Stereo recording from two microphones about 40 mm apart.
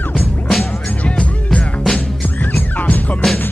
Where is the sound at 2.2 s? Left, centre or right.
Left.